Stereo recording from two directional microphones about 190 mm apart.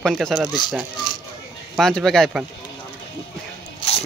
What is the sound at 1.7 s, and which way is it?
Speech, centre (ahead or behind).